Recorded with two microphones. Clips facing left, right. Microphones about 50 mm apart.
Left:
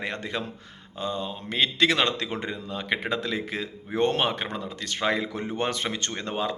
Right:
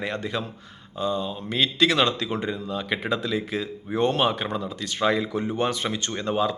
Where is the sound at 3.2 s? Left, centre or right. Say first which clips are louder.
Right 2 dB; left.